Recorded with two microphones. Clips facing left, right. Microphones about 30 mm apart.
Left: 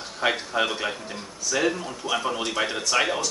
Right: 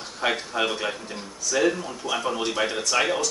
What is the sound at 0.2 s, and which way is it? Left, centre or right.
Speech, centre.